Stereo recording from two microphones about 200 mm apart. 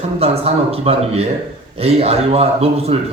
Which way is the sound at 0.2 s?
30° right (ahead or behind).